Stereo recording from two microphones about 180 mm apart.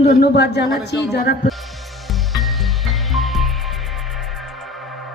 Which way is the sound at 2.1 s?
Centre (ahead or behind).